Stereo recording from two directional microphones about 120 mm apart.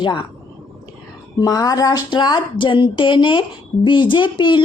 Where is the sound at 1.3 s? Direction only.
30° left (ahead or behind).